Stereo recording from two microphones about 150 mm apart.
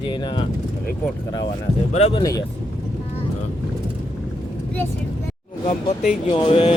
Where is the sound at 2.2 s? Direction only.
25° left (ahead or behind).